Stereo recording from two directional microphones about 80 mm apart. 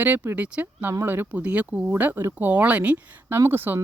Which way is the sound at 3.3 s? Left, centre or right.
Right.